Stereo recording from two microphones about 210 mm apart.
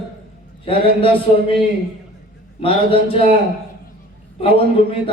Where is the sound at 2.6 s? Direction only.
25° left (ahead or behind).